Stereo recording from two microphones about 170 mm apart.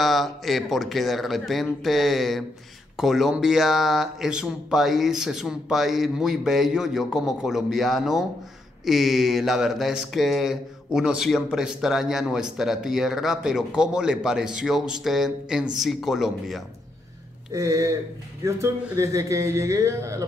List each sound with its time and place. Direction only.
0.0 s speech: centre (ahead or behind)
17.5 s a sound: 20° right (ahead or behind)
18.9 s a man's voice: 20° right (ahead or behind)